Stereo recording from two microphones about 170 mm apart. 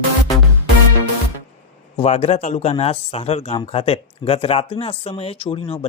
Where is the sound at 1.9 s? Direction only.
35° left (ahead or behind).